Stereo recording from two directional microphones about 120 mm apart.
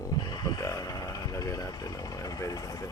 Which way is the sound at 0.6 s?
25° left (ahead or behind).